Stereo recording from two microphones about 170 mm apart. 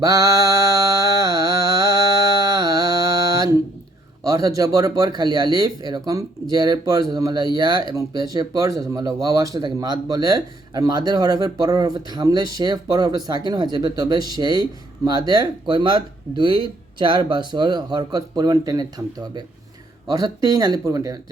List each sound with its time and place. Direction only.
0.0 s mantra: 20° right (ahead or behind)
4.3 s speech: 20° right (ahead or behind)